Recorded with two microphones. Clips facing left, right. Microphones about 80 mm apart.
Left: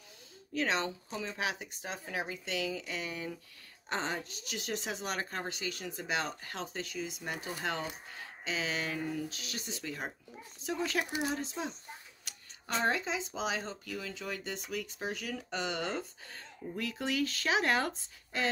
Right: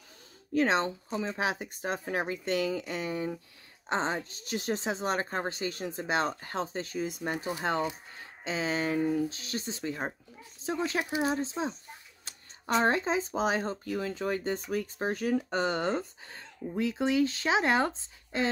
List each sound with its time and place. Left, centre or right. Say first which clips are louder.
0.6 s speech: right 6 dB; right